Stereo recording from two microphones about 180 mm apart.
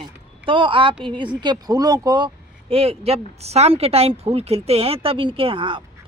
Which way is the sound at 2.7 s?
35° right (ahead or behind).